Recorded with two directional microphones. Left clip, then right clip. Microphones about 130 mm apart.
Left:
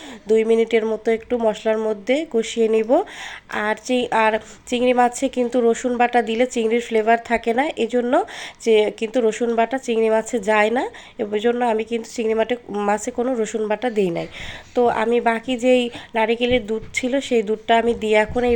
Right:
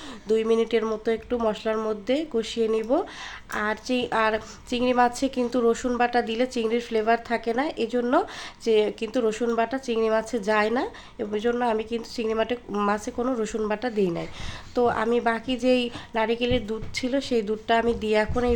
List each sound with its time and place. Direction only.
0.3 s speech: 15° left (ahead or behind)
11.6 s speech: 10° left (ahead or behind)
13.9 s speech: 30° left (ahead or behind)
14.8 s speech: 10° left (ahead or behind)
15.7 s speech: 10° left (ahead or behind)
17.0 s speech: 20° left (ahead or behind)